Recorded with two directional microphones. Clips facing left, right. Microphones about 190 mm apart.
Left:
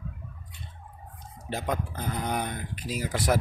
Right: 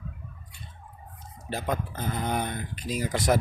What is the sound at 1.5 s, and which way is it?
Speech, 15° left (ahead or behind).